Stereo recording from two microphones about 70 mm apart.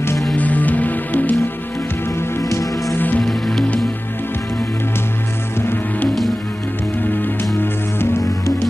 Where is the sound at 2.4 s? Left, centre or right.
Left.